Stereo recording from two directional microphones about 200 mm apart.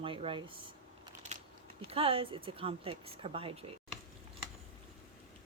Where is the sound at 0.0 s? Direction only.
25° right (ahead or behind).